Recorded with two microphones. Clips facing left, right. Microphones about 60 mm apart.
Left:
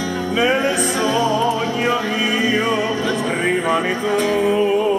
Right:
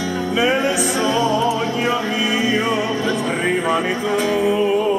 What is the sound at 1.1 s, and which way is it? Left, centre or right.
Music, centre.